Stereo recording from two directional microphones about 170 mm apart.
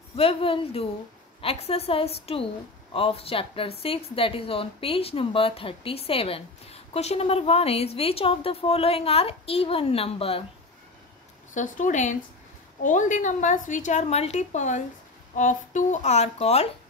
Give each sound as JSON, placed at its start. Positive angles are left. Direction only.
{"t": 0.1, "sound": "a woman's voice", "side_deg": 35}
{"t": 11.5, "sound": "speech", "side_deg": 45}